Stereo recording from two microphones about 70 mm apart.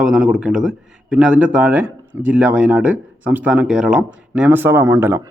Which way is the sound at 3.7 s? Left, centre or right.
Centre.